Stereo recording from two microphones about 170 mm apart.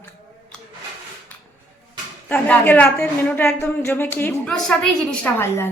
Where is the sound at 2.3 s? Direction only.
10° left (ahead or behind).